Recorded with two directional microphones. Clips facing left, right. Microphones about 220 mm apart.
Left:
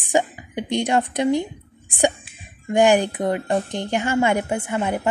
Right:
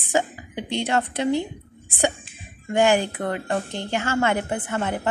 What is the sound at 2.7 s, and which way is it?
A woman's voice, 15° left (ahead or behind).